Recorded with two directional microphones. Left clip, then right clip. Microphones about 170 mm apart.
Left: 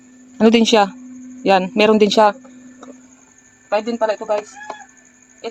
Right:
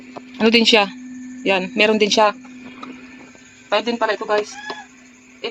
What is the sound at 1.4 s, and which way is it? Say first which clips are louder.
Speech: left 3 dB; 50° left (ahead or behind).